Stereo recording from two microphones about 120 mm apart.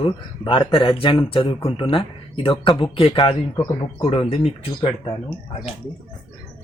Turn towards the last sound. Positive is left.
turn(degrees=55)  # may be behind; listen again after turning